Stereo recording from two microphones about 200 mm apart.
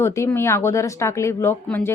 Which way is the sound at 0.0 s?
15° left (ahead or behind).